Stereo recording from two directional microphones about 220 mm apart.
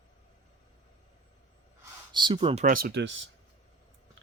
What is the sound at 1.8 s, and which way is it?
Speech, 20° right (ahead or behind).